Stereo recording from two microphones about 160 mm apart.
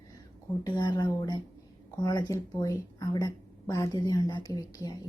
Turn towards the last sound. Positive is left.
turn(degrees=25)  # may be behind; listen again after turning